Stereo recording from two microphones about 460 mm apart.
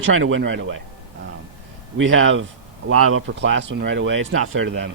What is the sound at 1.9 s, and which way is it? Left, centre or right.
Speech, right.